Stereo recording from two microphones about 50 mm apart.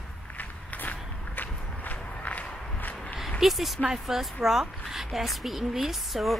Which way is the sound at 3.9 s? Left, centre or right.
Centre.